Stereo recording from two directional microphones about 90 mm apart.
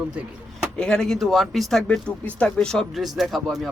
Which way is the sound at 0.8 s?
10° left (ahead or behind).